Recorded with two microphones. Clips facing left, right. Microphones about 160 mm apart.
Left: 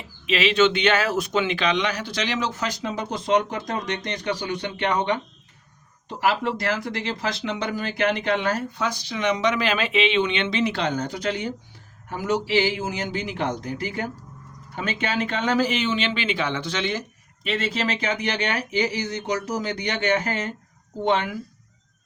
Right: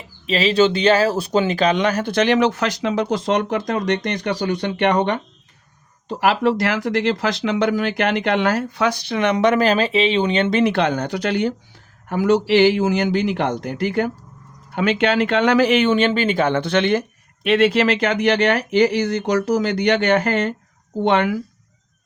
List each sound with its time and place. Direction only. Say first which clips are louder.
0.3 s speech: right 3 dB; 35° right (ahead or behind); by 11.5 s 75° right (ahead or behind)
12.0 s speech: right 8 dB; 85° right